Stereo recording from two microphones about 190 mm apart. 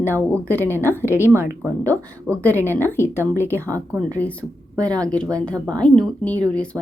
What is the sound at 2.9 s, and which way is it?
Speech, 10° left (ahead or behind).